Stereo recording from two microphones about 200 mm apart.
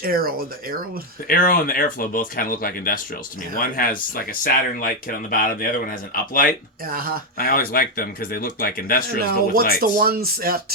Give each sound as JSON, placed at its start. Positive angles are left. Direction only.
{"t": 0.0, "sound": "speech", "side_deg": -45}
{"t": 1.3, "sound": "speech", "side_deg": 45}
{"t": 6.8, "sound": "speech", "side_deg": -45}
{"t": 7.3, "sound": "speech", "side_deg": 50}
{"t": 9.8, "sound": "speech", "side_deg": -50}